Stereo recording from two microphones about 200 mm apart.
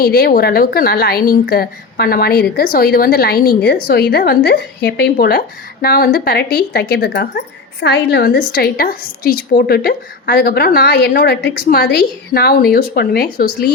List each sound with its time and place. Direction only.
0.0 s a woman's voice: 50° left (ahead or behind)